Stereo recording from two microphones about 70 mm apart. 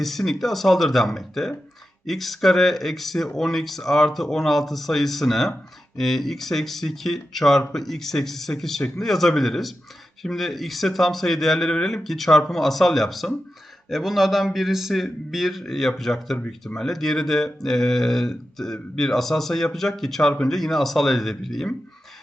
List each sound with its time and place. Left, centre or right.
0.0 s speech: centre